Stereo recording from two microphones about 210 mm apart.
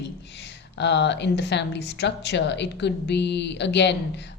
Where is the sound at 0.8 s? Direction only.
55° left (ahead or behind).